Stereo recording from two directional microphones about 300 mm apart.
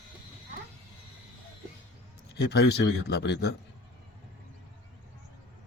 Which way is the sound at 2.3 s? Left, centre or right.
Left.